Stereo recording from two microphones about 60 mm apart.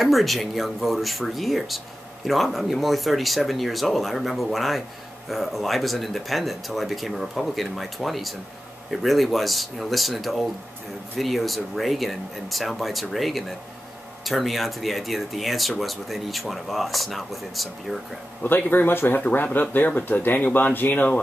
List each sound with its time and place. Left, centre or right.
0.0 s speech: centre
18.4 s speech: left